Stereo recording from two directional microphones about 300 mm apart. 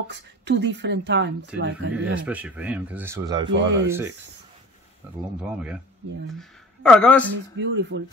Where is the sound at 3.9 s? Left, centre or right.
Centre.